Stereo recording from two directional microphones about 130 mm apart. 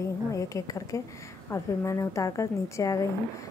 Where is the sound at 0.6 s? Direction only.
25° left (ahead or behind).